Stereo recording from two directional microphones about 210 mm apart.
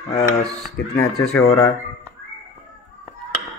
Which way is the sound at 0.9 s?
15° left (ahead or behind).